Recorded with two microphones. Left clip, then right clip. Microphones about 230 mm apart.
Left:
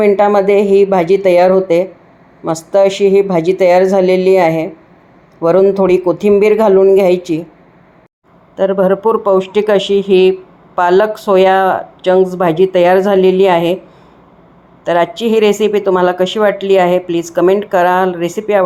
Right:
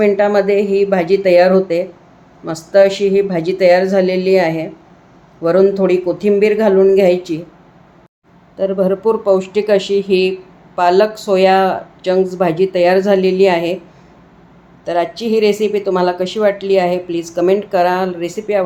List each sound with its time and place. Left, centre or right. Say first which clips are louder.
0.0 s speech: left 3 dB; centre
8.5 s speech: left 4 dB; centre
14.8 s speech: left 4 dB; centre